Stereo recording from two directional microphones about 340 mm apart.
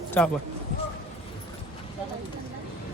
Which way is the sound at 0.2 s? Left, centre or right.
Centre.